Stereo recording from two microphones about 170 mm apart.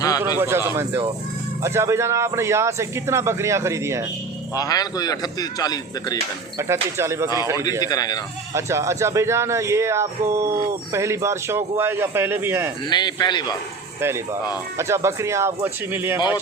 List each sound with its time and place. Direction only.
0.3 s a man's voice: 15° right (ahead or behind)
4.5 s speech: 20° left (ahead or behind)
6.6 s a man's voice: 15° right (ahead or behind)
7.8 s speech: 20° left (ahead or behind)
8.5 s a man's voice: 15° right (ahead or behind)
12.9 s speech: 25° left (ahead or behind)
14.8 s a man's voice: 15° right (ahead or behind)